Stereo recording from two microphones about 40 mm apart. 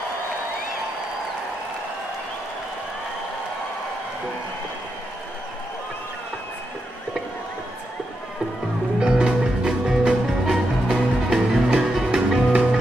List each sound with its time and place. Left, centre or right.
9.0 s music: right